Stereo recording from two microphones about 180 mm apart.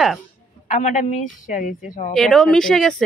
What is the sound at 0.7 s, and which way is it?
Speech, 40° left (ahead or behind).